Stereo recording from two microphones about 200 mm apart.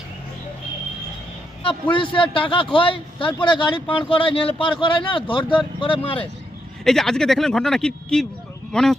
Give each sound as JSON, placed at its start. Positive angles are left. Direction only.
{"t": 1.6, "sound": "speech", "side_deg": 25}
{"t": 6.8, "sound": "speech", "side_deg": 0}